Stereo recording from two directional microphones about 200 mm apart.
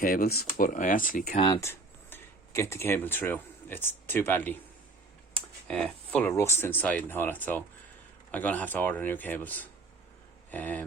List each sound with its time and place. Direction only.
0.0 s speech: 50° left (ahead or behind)
1.6 s speech: 10° left (ahead or behind)